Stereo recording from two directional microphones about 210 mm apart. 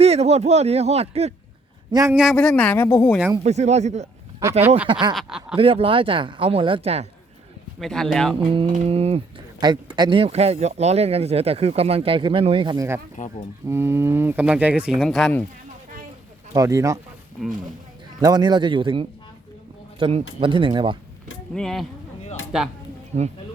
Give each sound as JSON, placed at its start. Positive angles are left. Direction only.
{"t": 0.0, "sound": "speech", "side_deg": -30}
{"t": 1.9, "sound": "speech", "side_deg": -15}
{"t": 2.1, "sound": "speech", "side_deg": 0}
{"t": 3.3, "sound": "speech", "side_deg": -30}
{"t": 4.9, "sound": "speech", "side_deg": -20}
{"t": 5.1, "sound": "speech", "side_deg": -5}
{"t": 5.5, "sound": "speech", "side_deg": -25}
{"t": 7.8, "sound": "speech", "side_deg": 0}
{"t": 8.4, "sound": "speech", "side_deg": -25}
{"t": 13.2, "sound": "speech", "side_deg": 35}
{"t": 13.7, "sound": "speech", "side_deg": -10}
{"t": 16.6, "sound": "speech", "side_deg": -15}
{"t": 18.2, "sound": "speech", "side_deg": -20}
{"t": 21.5, "sound": "speech", "side_deg": 0}